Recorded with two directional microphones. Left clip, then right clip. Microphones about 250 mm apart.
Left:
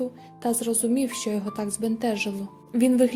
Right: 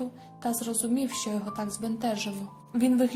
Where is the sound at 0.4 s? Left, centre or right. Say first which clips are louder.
Left 6 dB; left.